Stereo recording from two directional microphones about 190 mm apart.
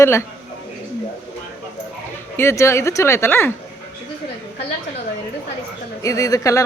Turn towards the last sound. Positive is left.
turn(degrees=15)  # may be behind; listen again after turning